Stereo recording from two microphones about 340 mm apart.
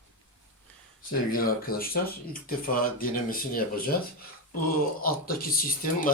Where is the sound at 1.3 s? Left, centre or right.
Left.